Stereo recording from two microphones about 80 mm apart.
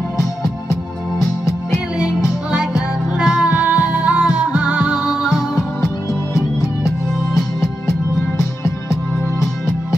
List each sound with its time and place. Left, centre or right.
2.0 s music: centre
3.4 s music: centre
5.0 s music: centre